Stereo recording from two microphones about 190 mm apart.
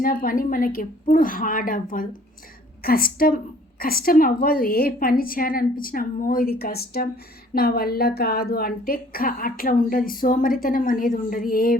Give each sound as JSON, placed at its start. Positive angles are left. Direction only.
{"t": 0.0, "sound": "a woman's voice", "side_deg": 50}